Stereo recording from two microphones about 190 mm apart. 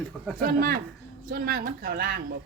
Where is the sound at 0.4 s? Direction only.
50° right (ahead or behind).